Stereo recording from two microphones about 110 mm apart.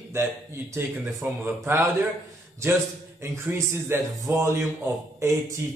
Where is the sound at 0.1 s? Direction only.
25° right (ahead or behind).